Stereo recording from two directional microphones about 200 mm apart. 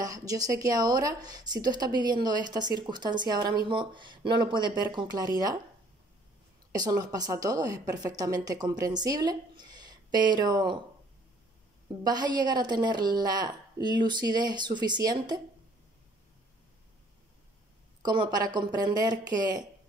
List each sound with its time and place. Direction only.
0.0 s speech: 15° right (ahead or behind)
6.7 s speech: 20° right (ahead or behind)
12.0 s speech: 20° right (ahead or behind)
18.0 s speech: 20° right (ahead or behind)